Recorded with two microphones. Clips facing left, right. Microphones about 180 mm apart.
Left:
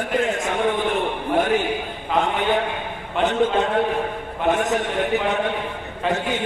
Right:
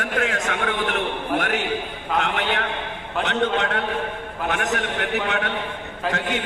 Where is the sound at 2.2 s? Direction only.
75° right (ahead or behind).